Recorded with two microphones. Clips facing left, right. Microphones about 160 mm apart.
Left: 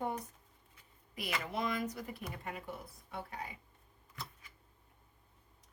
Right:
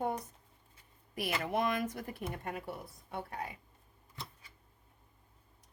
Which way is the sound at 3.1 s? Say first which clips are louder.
Right 3 dB; 50° right (ahead or behind).